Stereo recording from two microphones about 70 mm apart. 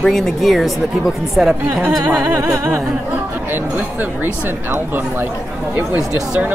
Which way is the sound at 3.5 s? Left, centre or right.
Right.